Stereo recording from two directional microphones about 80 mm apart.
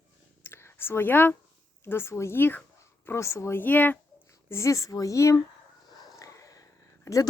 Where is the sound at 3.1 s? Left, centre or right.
Left.